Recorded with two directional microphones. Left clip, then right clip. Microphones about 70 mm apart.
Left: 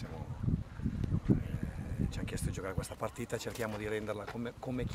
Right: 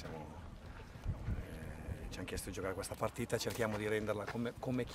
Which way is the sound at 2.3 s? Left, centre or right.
Centre.